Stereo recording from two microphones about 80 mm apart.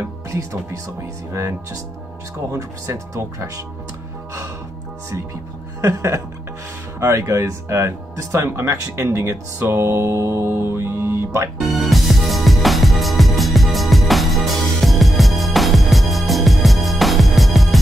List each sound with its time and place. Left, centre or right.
2.5 s speech: right
5.8 s speech: right
11.6 s music: centre